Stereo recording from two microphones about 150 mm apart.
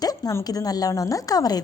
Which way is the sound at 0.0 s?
25° left (ahead or behind).